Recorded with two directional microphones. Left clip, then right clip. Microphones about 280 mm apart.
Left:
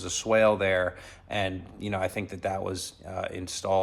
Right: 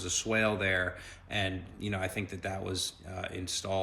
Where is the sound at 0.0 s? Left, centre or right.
Centre.